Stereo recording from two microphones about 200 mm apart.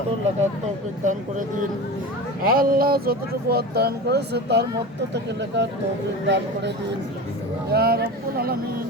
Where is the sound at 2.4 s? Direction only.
45° right (ahead or behind).